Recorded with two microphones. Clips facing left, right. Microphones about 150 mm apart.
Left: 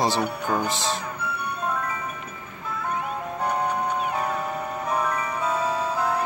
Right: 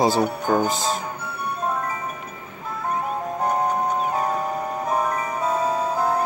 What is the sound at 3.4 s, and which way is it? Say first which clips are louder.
Music: right 3 dB; 45° right (ahead or behind).